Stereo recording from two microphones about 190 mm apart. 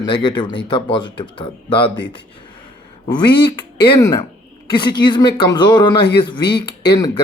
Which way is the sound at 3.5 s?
20° left (ahead or behind).